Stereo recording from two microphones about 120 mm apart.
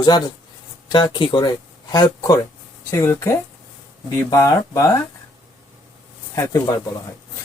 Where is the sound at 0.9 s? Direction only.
40° left (ahead or behind).